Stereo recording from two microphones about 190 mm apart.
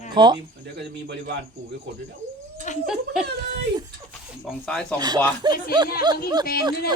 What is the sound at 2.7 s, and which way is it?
Speech, 40° left (ahead or behind).